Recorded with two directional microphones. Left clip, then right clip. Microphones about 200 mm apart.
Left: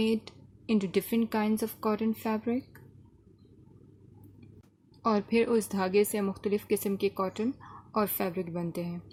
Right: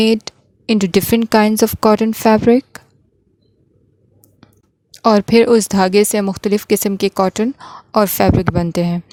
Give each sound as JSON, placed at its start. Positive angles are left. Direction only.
{"t": 0.0, "sound": "speech", "side_deg": -50}
{"t": 4.9, "sound": "speech", "side_deg": -50}